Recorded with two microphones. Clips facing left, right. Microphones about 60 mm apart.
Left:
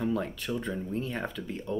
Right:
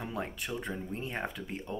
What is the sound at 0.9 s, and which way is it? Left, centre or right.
Speech, right.